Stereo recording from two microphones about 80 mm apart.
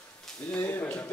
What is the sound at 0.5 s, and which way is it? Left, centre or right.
Speech, left.